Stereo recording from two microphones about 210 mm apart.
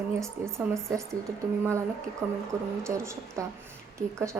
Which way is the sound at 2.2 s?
10° right (ahead or behind).